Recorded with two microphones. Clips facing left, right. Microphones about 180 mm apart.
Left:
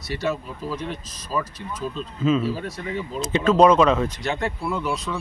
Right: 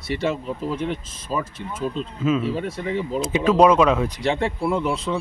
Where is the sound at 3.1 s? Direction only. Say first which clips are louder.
Even; 10° right (ahead or behind).